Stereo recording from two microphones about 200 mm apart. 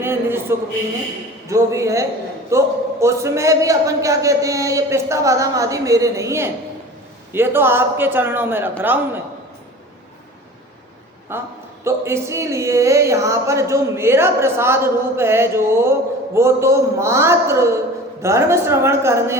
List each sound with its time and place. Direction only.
0.0 s speech: 10° right (ahead or behind)
11.3 s speech: 10° right (ahead or behind)